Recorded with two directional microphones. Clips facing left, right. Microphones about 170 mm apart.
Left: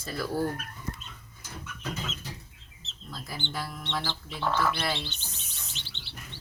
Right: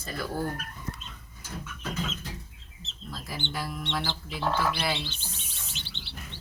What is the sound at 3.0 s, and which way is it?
Speech, centre (ahead or behind).